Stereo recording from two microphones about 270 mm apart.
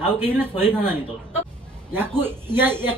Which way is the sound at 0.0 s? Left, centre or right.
Centre.